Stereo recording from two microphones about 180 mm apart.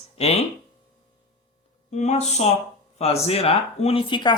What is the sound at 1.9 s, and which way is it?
Speech, 40° left (ahead or behind).